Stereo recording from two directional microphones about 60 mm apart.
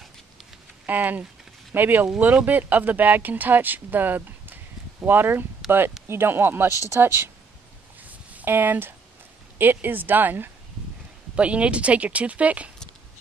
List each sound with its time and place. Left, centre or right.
0.8 s speech: right
8.0 s a sound: right
9.6 s speech: right
11.3 s speech: right